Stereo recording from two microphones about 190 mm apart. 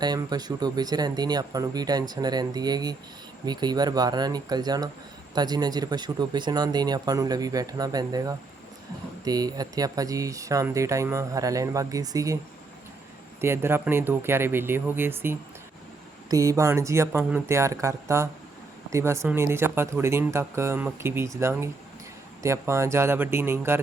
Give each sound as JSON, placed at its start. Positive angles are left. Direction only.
{"t": 0.0, "sound": "speech", "side_deg": -20}
{"t": 13.4, "sound": "speech", "side_deg": -15}